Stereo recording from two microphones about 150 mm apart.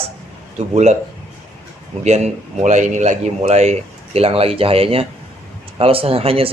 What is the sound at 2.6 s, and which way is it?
Speech, 55° right (ahead or behind).